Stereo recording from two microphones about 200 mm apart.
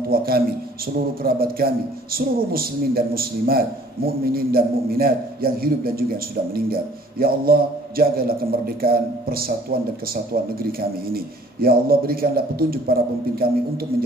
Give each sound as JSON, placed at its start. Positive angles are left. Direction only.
{"t": 0.1, "sound": "a man's voice", "side_deg": -50}